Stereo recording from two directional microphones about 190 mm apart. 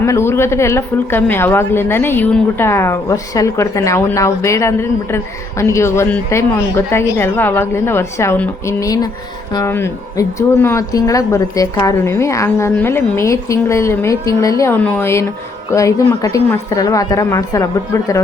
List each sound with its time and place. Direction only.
0.0 s a woman's voice: 15° left (ahead or behind)